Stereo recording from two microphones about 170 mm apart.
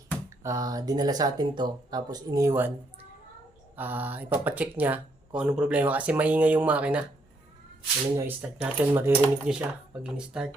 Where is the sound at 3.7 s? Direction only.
10° right (ahead or behind).